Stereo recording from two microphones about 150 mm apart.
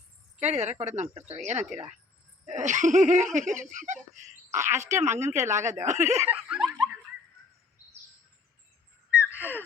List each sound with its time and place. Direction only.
0.3 s speech: 50° right (ahead or behind)
4.5 s speech: 15° right (ahead or behind)
4.8 s speech: 50° right (ahead or behind)
6.2 s snicker: 5° right (ahead or behind)